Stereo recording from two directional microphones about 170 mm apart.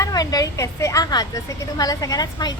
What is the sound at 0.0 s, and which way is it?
A woman's voice, 20° left (ahead or behind).